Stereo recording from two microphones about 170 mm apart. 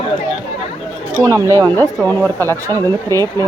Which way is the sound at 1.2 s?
20° right (ahead or behind).